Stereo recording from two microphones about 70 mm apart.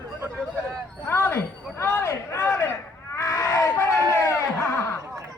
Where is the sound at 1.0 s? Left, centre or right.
Left.